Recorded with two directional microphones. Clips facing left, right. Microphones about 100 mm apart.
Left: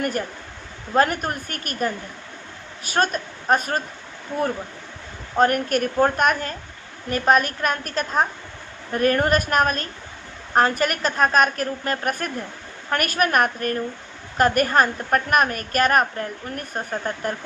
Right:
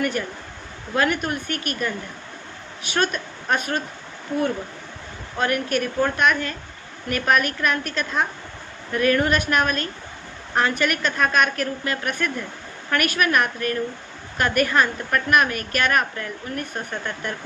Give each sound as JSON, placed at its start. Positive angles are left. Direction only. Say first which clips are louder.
{"t": 0.0, "sound": "speech", "louder": "even", "side_deg": 40}
{"t": 5.4, "sound": "a woman's voice", "louder": "left 4 dB", "side_deg": 45}